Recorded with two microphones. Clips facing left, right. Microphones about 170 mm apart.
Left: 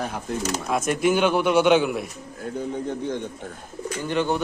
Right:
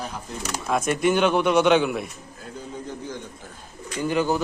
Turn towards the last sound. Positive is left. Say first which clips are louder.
# right 1 dB
turn(degrees=-5)  # may be behind; listen again after turning